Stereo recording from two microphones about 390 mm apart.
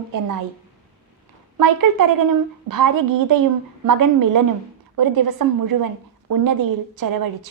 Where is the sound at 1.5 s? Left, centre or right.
Right.